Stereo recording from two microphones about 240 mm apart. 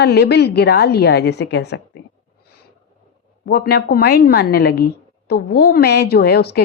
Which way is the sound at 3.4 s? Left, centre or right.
Left.